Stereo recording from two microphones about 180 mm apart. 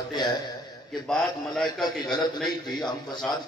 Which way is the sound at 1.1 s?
5° left (ahead or behind).